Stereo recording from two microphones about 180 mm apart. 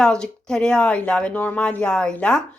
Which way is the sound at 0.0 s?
5° left (ahead or behind).